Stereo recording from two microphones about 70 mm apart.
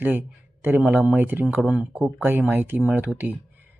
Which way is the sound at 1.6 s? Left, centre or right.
Centre.